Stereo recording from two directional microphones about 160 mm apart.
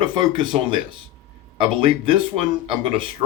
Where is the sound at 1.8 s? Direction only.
35° right (ahead or behind).